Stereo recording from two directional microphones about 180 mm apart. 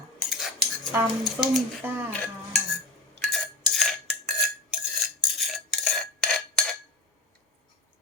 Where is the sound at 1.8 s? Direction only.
10° right (ahead or behind).